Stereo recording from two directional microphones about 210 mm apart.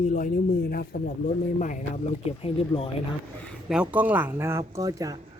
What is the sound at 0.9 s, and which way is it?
Speech, 45° left (ahead or behind).